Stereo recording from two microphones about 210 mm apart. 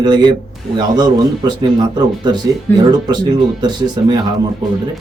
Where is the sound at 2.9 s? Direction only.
20° right (ahead or behind).